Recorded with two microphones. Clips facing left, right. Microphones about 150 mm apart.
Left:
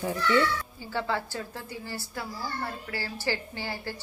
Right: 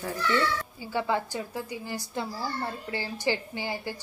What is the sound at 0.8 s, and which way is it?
A child's voice, 15° right (ahead or behind).